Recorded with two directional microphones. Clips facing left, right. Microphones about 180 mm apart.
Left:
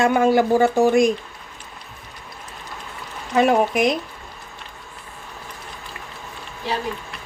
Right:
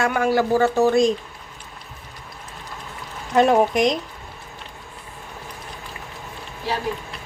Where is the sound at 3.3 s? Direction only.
5° left (ahead or behind).